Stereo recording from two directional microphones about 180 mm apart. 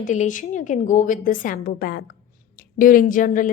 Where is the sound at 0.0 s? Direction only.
45° left (ahead or behind).